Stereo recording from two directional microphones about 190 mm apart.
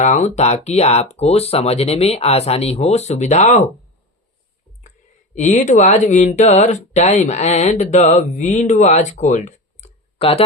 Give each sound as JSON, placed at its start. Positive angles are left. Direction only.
{"t": 0.0, "sound": "speech", "side_deg": 40}
{"t": 5.3, "sound": "speech", "side_deg": 40}